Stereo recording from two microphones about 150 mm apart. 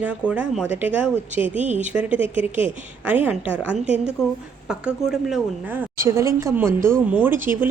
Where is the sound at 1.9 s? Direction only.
10° right (ahead or behind).